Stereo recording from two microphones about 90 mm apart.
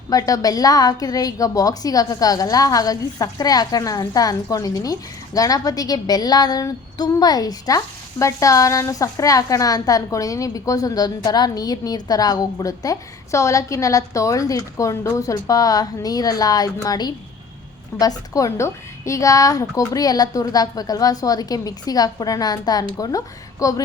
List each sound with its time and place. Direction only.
0.1 s a woman's voice: 40° left (ahead or behind)